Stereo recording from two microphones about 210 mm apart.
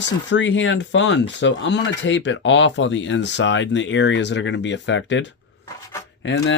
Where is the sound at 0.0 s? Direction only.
60° left (ahead or behind).